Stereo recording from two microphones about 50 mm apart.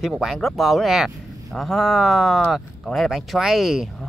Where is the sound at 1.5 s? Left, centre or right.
Centre.